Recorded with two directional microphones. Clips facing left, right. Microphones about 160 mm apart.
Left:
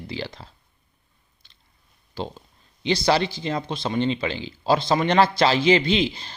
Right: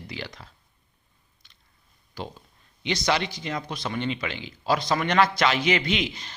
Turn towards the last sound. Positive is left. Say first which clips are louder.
# left 5 dB
turn(degrees=30)  # may be behind; listen again after turning